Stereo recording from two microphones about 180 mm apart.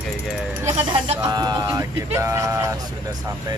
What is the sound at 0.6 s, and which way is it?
Speech, 15° right (ahead or behind).